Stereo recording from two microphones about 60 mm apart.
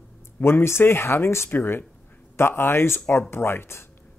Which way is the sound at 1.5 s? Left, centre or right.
Left.